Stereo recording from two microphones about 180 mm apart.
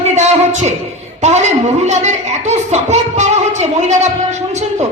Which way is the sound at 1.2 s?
40° right (ahead or behind).